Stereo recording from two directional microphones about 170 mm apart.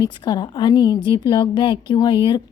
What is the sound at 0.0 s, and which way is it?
A woman's voice, 25° left (ahead or behind).